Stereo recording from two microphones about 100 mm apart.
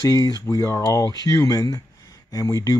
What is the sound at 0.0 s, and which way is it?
Speech, 35° left (ahead or behind).